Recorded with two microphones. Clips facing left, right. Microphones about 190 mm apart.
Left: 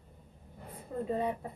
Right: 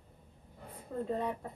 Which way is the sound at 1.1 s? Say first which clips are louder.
Left 3 dB; 5° left (ahead or behind).